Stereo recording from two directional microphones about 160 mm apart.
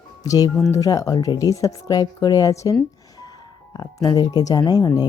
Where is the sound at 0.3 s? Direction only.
25° left (ahead or behind).